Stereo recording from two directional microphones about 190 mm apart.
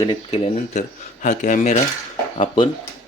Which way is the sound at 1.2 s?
40° left (ahead or behind).